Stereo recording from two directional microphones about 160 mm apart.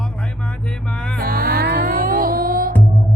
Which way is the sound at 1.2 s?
65° right (ahead or behind).